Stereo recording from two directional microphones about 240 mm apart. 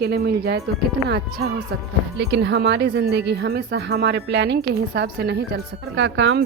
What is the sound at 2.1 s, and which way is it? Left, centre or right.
Speech, right.